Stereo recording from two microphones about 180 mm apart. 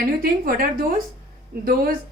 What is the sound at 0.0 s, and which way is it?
A woman's voice, 55° right (ahead or behind).